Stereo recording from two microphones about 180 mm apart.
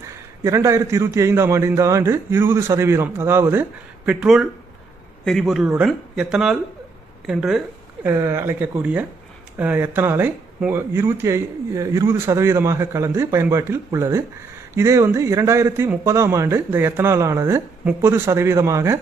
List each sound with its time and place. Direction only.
0.0 s speech: 15° right (ahead or behind)
8.0 s speech: 15° right (ahead or behind)